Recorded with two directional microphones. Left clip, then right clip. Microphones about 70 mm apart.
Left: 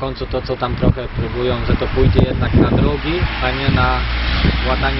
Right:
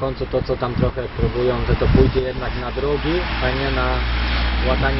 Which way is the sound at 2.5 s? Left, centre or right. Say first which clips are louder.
Left 7 dB; right.